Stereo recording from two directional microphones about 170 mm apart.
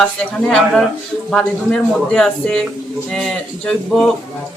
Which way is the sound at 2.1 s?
5° left (ahead or behind).